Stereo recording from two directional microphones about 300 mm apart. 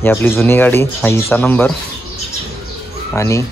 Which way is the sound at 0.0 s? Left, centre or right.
Centre.